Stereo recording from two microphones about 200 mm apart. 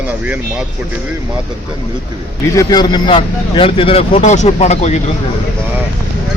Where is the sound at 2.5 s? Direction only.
20° left (ahead or behind); by 5.0 s 35° left (ahead or behind).